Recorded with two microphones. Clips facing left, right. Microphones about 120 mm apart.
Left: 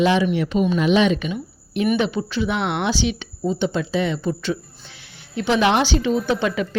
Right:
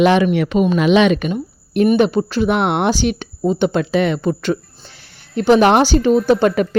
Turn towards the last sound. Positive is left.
turn(degrees=-50)  # may be behind; listen again after turning